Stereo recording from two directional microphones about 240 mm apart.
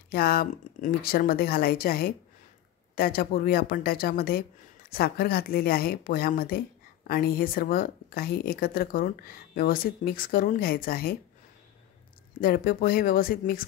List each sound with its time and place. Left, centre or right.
0.1 s speech: left
12.4 s speech: left